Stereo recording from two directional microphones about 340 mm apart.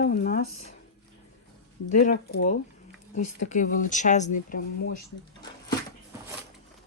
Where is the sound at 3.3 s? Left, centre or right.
Left.